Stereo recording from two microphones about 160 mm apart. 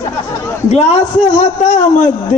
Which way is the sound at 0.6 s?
45° left (ahead or behind).